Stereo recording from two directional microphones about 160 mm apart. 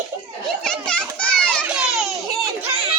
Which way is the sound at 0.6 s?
5° left (ahead or behind).